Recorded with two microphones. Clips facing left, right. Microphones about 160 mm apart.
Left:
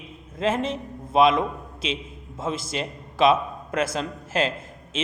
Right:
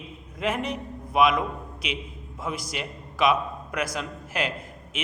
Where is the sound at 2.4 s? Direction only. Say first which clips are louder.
Left 4 dB; 25° left (ahead or behind).